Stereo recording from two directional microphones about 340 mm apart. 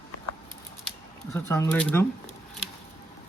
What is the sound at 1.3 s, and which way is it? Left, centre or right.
Speech, centre.